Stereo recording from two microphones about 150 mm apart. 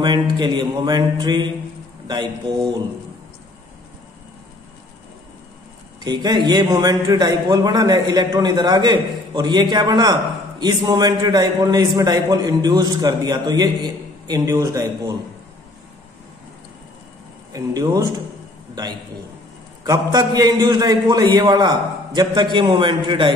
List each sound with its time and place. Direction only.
0.0 s a man's voice: 30° right (ahead or behind)
6.0 s a man's voice: 30° right (ahead or behind)
17.5 s speech: 25° right (ahead or behind)
19.8 s a man's voice: 25° right (ahead or behind)